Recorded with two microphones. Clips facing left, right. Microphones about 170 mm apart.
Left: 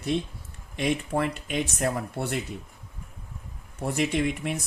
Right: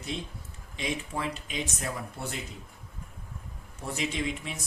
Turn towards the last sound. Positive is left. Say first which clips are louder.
# left 6 dB
turn(degrees=60)  # may be behind; listen again after turning